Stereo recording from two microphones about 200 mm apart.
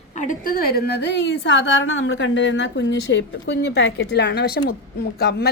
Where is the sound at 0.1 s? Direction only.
40° left (ahead or behind).